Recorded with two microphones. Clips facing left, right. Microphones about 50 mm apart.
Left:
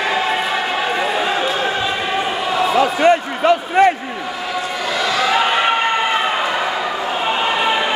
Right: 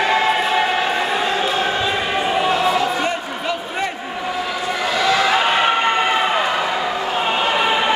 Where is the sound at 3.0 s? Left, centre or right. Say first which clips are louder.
Left 9 dB; left.